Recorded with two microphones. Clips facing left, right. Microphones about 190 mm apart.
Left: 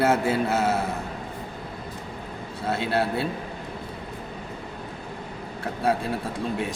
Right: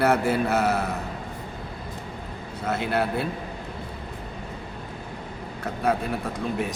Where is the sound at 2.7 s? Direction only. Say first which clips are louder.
Even; 30° left (ahead or behind).